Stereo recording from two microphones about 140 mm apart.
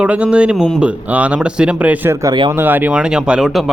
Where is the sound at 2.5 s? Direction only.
15° right (ahead or behind).